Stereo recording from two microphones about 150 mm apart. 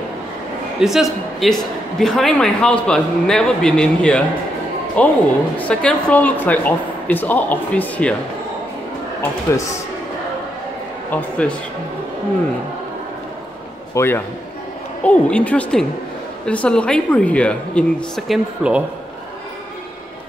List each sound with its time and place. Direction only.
0.7 s speech: centre (ahead or behind)
9.5 s a man's voice: 20° left (ahead or behind)
11.1 s speech: 10° left (ahead or behind)
13.9 s speech: 15° left (ahead or behind); by 18.8 s 5° right (ahead or behind)